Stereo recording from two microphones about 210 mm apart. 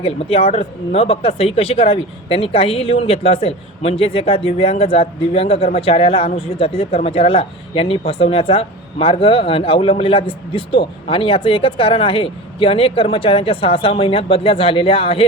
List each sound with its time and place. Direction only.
0.0 s speech: 25° left (ahead or behind)